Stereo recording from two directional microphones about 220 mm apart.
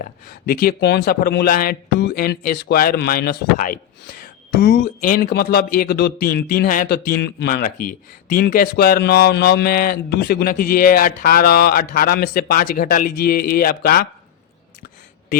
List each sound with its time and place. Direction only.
0.0 s speech: 40° left (ahead or behind)